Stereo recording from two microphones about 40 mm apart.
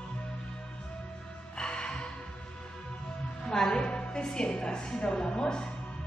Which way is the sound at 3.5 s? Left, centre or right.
Centre.